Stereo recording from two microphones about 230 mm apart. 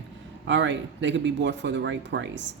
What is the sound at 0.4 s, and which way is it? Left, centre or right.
Speech, right.